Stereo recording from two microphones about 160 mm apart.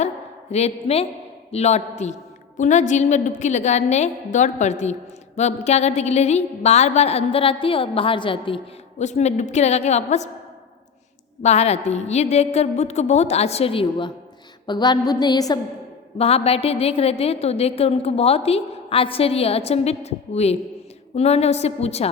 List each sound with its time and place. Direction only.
0.5 s a woman's voice: 40° left (ahead or behind)
9.0 s a woman's voice: 45° left (ahead or behind)
11.4 s a woman's voice: 40° left (ahead or behind)
14.7 s music: 25° left (ahead or behind)
16.1 s a woman's voice: 40° left (ahead or behind)